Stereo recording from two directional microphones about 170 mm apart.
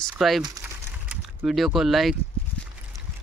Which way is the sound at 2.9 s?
20° right (ahead or behind).